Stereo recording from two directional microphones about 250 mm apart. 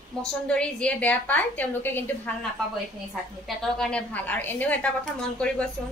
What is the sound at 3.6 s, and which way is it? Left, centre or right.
A woman's voice, centre.